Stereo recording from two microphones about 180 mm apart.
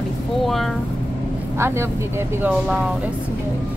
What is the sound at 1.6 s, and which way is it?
Speech, 15° right (ahead or behind).